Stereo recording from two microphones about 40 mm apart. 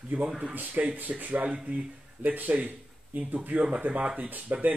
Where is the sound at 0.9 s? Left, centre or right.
Right.